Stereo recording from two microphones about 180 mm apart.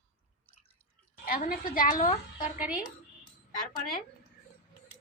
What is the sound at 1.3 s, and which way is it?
A woman's voice, 50° left (ahead or behind).